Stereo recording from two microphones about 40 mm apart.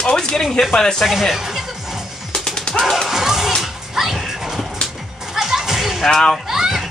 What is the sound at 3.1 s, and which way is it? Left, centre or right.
Music, centre.